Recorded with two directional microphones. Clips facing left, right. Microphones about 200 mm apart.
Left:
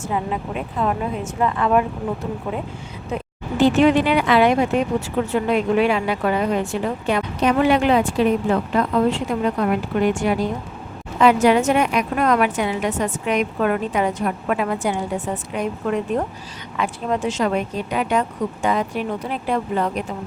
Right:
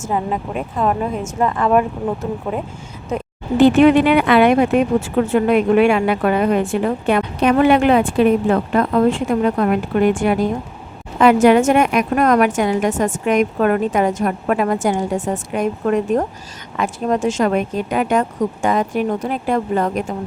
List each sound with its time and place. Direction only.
0.1 s a woman's voice: 45° right (ahead or behind)
3.6 s a woman's voice: 60° right (ahead or behind)